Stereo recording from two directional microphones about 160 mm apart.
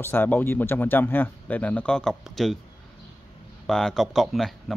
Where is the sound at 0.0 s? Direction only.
10° left (ahead or behind).